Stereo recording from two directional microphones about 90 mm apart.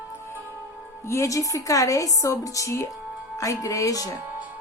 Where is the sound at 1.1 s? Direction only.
35° left (ahead or behind).